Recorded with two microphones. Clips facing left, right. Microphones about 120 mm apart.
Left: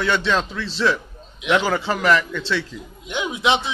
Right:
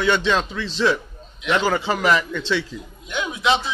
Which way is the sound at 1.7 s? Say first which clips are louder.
Even; centre (ahead or behind).